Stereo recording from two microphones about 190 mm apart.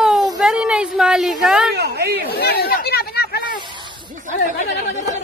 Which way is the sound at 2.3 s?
55° left (ahead or behind).